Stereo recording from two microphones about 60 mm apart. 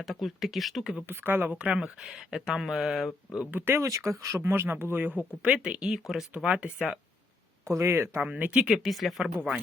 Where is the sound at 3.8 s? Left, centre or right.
Right.